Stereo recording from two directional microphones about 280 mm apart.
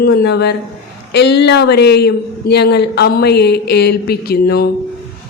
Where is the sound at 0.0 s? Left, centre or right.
Left.